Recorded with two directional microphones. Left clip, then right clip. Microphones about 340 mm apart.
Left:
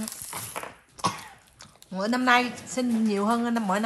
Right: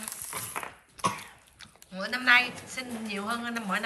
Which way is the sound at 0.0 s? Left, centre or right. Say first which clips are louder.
Left 2 dB; centre.